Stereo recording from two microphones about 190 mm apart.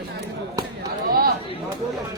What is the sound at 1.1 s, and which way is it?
Chatter, 50° right (ahead or behind).